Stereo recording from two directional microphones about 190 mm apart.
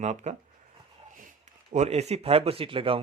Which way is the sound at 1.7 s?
35° right (ahead or behind).